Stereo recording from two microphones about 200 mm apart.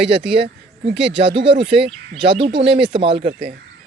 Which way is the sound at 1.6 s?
25° right (ahead or behind).